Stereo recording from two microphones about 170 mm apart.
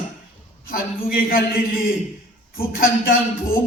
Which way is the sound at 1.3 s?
60° left (ahead or behind).